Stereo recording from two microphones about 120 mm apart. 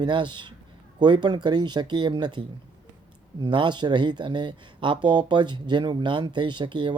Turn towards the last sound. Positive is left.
turn(degrees=-40)  # may be behind; listen again after turning